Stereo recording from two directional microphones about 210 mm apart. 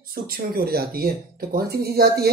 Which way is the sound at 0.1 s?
45° right (ahead or behind).